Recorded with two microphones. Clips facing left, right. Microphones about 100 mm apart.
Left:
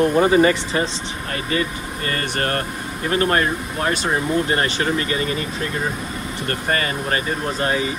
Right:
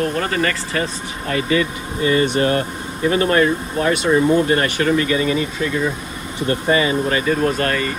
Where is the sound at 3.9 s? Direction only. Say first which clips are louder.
Right 7 dB; 30° left (ahead or behind).